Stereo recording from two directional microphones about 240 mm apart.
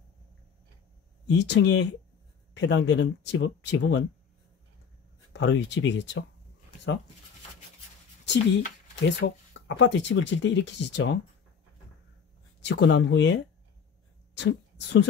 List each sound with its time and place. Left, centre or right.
1.2 s speech: left
5.3 s speech: left
9.0 s speech: left
12.6 s speech: left
14.3 s a sound: left